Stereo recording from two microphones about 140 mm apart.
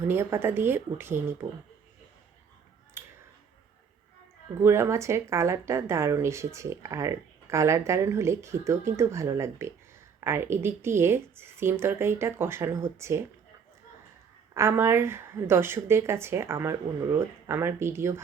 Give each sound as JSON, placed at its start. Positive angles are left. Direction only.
{"t": 0.1, "sound": "a woman's voice", "side_deg": -15}
{"t": 3.0, "sound": "a sound", "side_deg": -20}
{"t": 4.6, "sound": "a woman's voice", "side_deg": -20}
{"t": 14.5, "sound": "a woman's voice", "side_deg": -20}